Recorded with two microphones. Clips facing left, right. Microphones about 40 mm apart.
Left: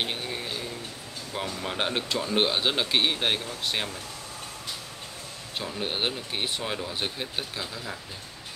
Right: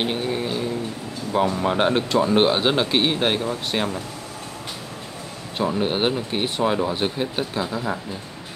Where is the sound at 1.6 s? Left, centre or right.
Centre.